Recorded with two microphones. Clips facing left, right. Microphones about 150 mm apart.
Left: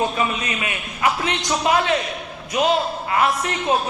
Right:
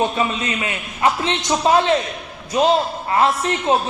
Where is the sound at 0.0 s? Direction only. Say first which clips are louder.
Right 2 dB; 25° right (ahead or behind).